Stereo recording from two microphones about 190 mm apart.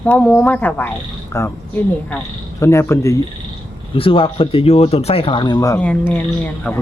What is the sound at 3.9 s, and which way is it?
Speech, 30° left (ahead or behind).